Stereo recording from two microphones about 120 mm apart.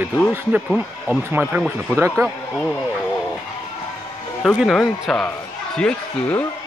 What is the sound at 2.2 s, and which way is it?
Speech, centre (ahead or behind).